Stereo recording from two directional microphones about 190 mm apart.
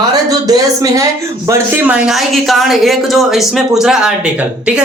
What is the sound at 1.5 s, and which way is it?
Music, 5° right (ahead or behind).